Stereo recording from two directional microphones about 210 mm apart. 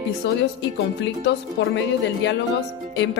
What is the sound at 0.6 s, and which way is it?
Speech, 60° left (ahead or behind).